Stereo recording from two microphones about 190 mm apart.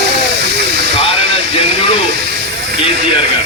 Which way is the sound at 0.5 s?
60° right (ahead or behind).